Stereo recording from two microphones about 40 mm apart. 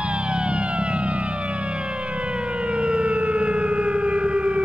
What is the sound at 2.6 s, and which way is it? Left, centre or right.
Civil defense siren, right.